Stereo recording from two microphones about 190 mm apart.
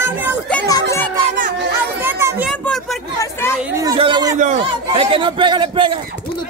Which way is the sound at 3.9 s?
25° right (ahead or behind).